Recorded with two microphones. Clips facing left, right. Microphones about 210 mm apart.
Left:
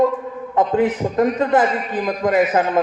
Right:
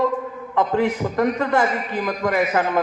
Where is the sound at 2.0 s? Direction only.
30° left (ahead or behind).